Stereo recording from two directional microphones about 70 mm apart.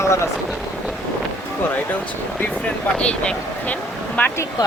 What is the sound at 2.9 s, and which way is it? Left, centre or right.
Speech, centre.